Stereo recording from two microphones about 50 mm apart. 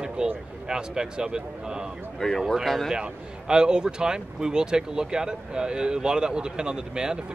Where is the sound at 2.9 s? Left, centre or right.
Centre.